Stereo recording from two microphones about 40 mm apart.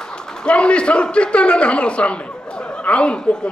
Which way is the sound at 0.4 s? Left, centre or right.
Left.